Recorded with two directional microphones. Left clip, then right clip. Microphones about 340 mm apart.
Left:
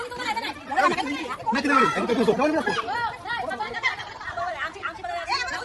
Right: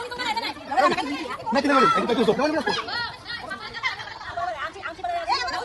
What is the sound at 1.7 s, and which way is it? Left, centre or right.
Speech, centre.